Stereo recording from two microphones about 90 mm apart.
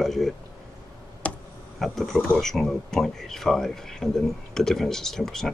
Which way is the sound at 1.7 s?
Centre (ahead or behind).